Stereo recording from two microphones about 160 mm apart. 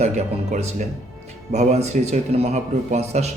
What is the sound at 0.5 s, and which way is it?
A man's voice, 45° right (ahead or behind).